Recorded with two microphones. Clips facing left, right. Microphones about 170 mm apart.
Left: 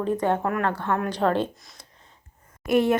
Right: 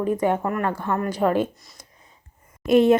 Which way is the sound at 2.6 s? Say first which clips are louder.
Right 5 dB; 20° right (ahead or behind).